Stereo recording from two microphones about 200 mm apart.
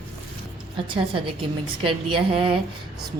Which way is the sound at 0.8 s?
25° right (ahead or behind).